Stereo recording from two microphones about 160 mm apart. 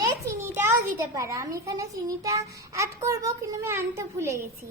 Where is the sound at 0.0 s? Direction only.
15° right (ahead or behind).